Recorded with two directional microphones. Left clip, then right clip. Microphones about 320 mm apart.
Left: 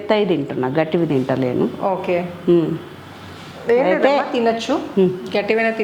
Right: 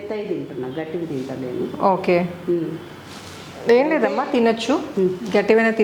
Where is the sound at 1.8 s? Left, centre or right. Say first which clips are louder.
Right 6 dB; right.